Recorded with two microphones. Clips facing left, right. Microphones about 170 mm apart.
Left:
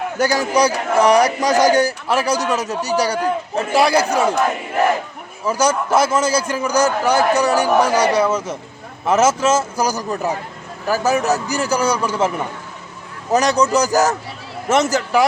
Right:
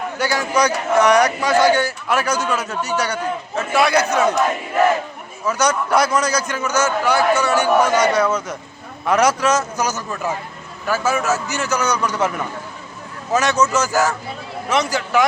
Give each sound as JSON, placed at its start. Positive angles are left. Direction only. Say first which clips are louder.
{"t": 0.2, "sound": "a man's voice", "louder": "left 3 dB", "side_deg": 40}
{"t": 5.5, "sound": "a man's voice", "louder": "left 1 dB", "side_deg": 30}